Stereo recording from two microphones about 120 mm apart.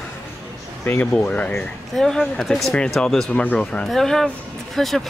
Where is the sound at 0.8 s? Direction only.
15° left (ahead or behind).